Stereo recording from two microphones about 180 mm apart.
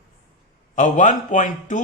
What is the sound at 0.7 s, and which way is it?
Speech, 45° left (ahead or behind).